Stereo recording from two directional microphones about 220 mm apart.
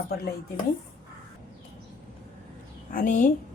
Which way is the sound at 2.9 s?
35° left (ahead or behind).